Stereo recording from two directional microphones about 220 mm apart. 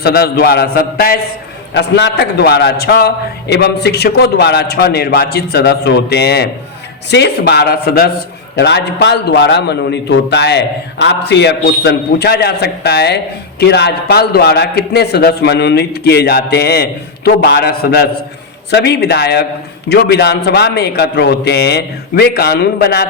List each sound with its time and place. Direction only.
0.0 s a man's voice: 45° left (ahead or behind)